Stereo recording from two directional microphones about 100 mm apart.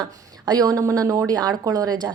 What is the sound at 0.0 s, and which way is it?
A woman's voice, 40° right (ahead or behind).